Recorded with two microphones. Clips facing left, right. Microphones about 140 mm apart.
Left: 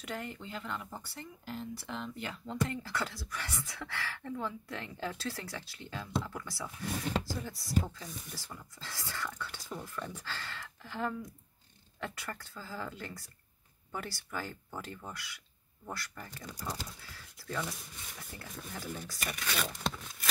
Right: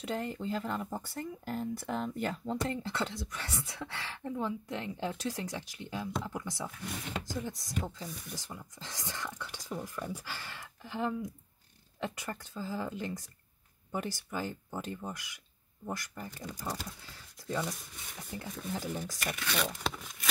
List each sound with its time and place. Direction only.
0.0 s speech: 30° right (ahead or behind)
2.6 s speech: 25° right (ahead or behind)
19.4 s a sound: centre (ahead or behind)